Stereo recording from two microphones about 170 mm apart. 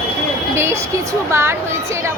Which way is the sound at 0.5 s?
15° right (ahead or behind).